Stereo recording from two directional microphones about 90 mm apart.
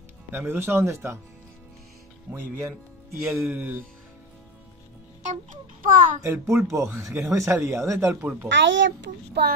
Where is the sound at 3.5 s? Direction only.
20° right (ahead or behind).